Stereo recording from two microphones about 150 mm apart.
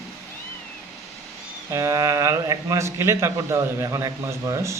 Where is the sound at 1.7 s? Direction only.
20° right (ahead or behind).